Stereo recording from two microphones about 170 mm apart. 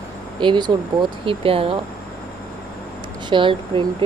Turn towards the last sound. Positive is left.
turn(degrees=-30)  # may be behind; listen again after turning